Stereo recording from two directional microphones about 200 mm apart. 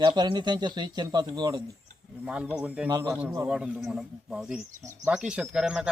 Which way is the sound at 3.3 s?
10° right (ahead or behind).